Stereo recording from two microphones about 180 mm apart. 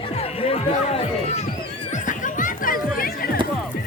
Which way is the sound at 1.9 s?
45° left (ahead or behind).